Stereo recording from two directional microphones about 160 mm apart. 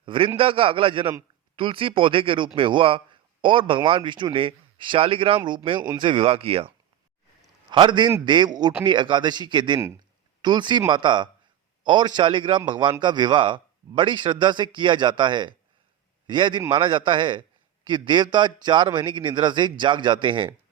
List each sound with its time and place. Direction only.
0.0 s a man's voice: 30° right (ahead or behind)
7.7 s a man's voice: 30° right (ahead or behind)